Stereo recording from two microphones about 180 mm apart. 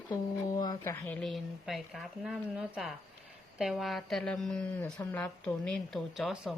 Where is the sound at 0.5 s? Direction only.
20° left (ahead or behind).